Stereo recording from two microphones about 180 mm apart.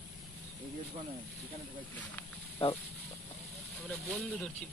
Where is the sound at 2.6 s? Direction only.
35° left (ahead or behind).